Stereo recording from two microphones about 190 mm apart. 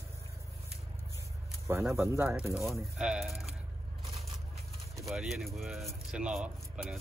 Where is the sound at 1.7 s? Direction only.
15° right (ahead or behind).